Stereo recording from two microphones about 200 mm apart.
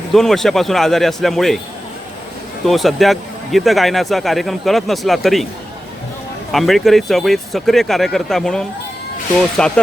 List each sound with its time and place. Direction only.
0.1 s speech: centre (ahead or behind)
2.6 s speech: centre (ahead or behind)
6.5 s speech: centre (ahead or behind)